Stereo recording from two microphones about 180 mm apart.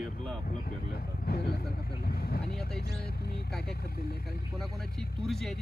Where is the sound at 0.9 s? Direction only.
60° left (ahead or behind).